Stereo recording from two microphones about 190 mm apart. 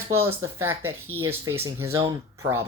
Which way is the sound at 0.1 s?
15° right (ahead or behind).